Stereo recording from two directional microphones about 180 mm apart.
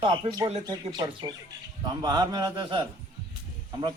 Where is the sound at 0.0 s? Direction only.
25° right (ahead or behind).